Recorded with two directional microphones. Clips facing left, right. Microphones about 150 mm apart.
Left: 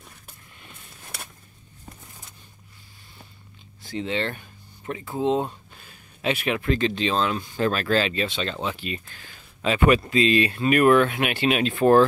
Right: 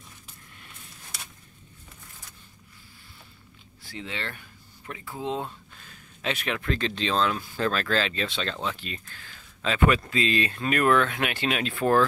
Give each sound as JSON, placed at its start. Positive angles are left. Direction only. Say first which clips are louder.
{"t": 3.8, "sound": "speech", "louder": "left 9 dB", "side_deg": 25}